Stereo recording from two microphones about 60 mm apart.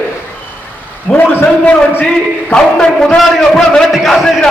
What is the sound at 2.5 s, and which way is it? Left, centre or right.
A man's voice, centre.